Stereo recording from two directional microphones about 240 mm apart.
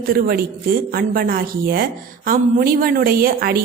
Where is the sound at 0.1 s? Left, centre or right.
Right.